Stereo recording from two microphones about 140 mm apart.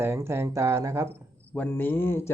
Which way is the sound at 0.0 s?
15° right (ahead or behind).